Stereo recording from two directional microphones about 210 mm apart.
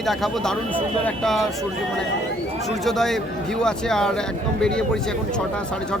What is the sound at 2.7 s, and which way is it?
Speech, centre (ahead or behind).